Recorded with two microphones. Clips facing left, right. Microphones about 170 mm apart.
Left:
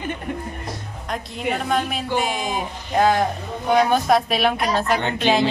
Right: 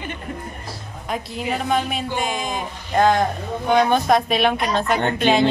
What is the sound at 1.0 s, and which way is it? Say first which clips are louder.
Speech: even; 5° right (ahead or behind).